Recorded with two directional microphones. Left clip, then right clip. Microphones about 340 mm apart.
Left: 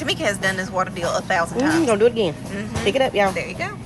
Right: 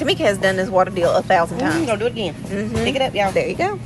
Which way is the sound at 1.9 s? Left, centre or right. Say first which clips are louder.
Left 4 dB; left.